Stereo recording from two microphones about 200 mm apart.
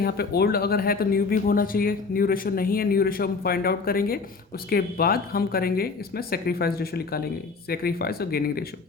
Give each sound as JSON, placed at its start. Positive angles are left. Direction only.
{"t": 0.0, "sound": "speech", "side_deg": 50}